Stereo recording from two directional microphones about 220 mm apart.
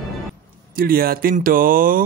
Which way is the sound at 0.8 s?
40° right (ahead or behind).